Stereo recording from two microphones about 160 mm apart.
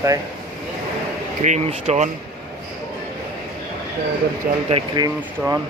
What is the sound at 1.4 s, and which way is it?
Speech, 45° right (ahead or behind).